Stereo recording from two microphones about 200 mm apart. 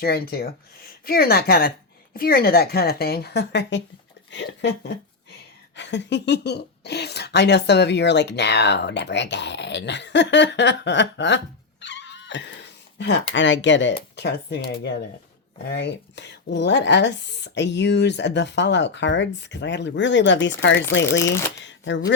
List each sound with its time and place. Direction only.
0.0 s a woman's voice: 50° left (ahead or behind)
5.7 s speech: 60° left (ahead or behind)
11.8 s cat: 65° left (ahead or behind)
13.3 s speech: 65° left (ahead or behind)
21.0 s speech: 15° left (ahead or behind)
21.6 s speech: 65° left (ahead or behind)